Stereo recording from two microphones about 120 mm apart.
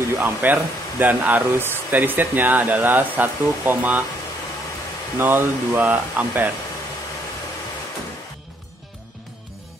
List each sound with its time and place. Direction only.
0.2 s speech: 15° right (ahead or behind)
5.2 s speech: 15° right (ahead or behind)